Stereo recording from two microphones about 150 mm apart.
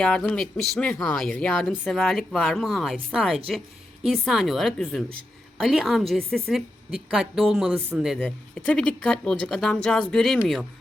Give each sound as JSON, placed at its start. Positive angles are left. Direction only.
{"t": 0.0, "sound": "speech", "side_deg": 5}
{"t": 8.6, "sound": "speech", "side_deg": 10}